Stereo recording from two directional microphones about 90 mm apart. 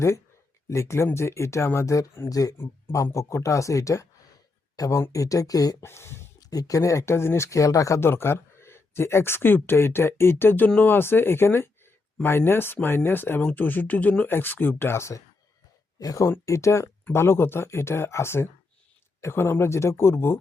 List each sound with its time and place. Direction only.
0.7 s speech: 30° left (ahead or behind)
2.6 s speech: 30° left (ahead or behind)
5.8 s speech: 30° left (ahead or behind)
6.5 s speech: 40° left (ahead or behind)